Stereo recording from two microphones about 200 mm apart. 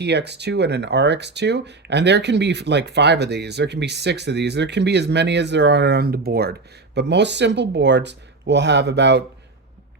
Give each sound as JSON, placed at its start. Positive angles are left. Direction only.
{"t": 0.0, "sound": "speech", "side_deg": -55}